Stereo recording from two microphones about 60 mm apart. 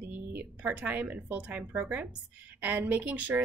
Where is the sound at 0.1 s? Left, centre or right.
Right.